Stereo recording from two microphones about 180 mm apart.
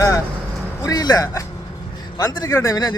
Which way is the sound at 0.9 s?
20° left (ahead or behind).